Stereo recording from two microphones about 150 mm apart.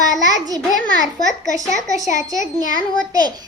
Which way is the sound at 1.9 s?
55° left (ahead or behind).